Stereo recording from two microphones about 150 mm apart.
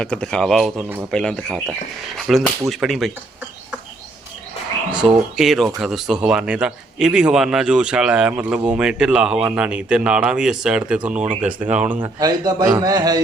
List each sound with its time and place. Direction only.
0.0 s speech: 5° left (ahead or behind)
4.9 s speech: 5° right (ahead or behind)
11.9 s a man's voice: 25° right (ahead or behind)